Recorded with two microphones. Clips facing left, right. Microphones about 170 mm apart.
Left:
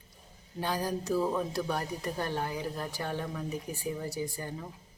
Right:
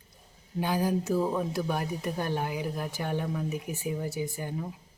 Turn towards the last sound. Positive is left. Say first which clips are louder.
# right 4 dB
turn(degrees=-5)  # may be behind; listen again after turning